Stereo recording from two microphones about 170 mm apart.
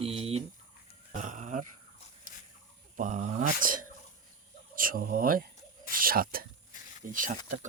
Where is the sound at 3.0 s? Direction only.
45° right (ahead or behind).